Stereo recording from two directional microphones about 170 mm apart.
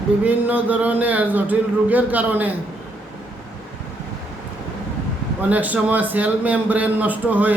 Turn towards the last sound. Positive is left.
turn(degrees=-10)  # may be behind; listen again after turning